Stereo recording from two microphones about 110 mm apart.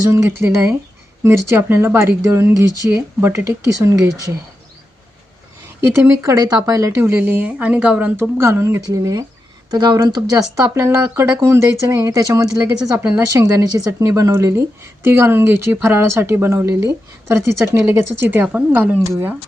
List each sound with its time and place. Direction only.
0.1 s speech: 25° right (ahead or behind)
5.9 s speech: 20° right (ahead or behind)
10.6 s speech: 25° right (ahead or behind)
13.0 s speech: 20° right (ahead or behind)
13.3 s speech: 30° right (ahead or behind); by 18.9 s 15° right (ahead or behind)